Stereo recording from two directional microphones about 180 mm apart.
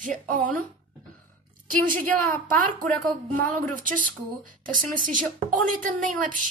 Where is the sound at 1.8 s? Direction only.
50° right (ahead or behind).